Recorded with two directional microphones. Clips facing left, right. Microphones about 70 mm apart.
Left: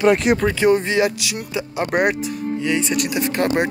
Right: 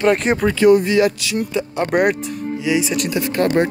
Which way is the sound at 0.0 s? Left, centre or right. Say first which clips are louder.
Even; right.